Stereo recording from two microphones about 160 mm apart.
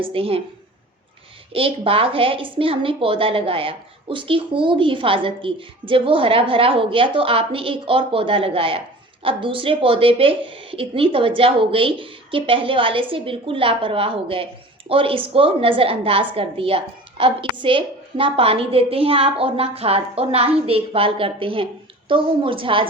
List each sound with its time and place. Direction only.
0.0 s a woman's voice: 35° right (ahead or behind)
1.5 s a woman's voice: 35° right (ahead or behind)